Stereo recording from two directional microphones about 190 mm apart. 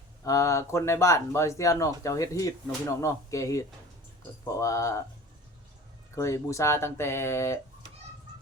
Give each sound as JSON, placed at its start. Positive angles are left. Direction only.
{"t": 0.3, "sound": "speech", "side_deg": 15}
{"t": 6.1, "sound": "speech", "side_deg": 15}